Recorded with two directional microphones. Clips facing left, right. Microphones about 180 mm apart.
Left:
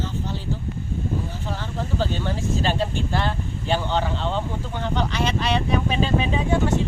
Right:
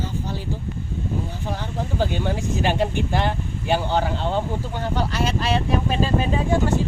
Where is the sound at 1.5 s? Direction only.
15° right (ahead or behind).